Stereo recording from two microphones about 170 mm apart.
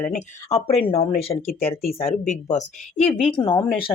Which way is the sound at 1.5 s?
60° left (ahead or behind).